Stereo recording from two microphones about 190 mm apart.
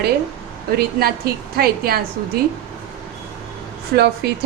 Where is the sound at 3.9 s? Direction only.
60° right (ahead or behind).